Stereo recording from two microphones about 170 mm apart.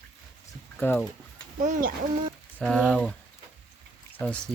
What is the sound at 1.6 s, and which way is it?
Speech, 50° right (ahead or behind).